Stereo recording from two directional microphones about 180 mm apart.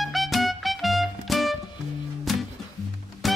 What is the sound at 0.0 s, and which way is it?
Music, centre (ahead or behind).